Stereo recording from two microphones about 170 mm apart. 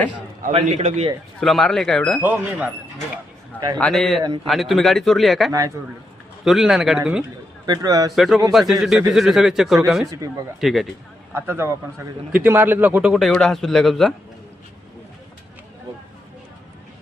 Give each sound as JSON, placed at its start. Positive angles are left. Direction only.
{"t": 0.6, "sound": "a man's voice", "side_deg": -40}
{"t": 1.4, "sound": "a man's voice", "side_deg": 5}
{"t": 2.2, "sound": "speech", "side_deg": -10}
{"t": 3.8, "sound": "a man's voice", "side_deg": 5}
{"t": 5.5, "sound": "a man's voice", "side_deg": -20}
{"t": 6.4, "sound": "a man's voice", "side_deg": 0}
{"t": 7.7, "sound": "a man's voice", "side_deg": -20}
{"t": 8.1, "sound": "a man's voice", "side_deg": 0}
{"t": 10.1, "sound": "a man's voice", "side_deg": -20}
{"t": 10.6, "sound": "a man's voice", "side_deg": 0}
{"t": 11.3, "sound": "a man's voice", "side_deg": -15}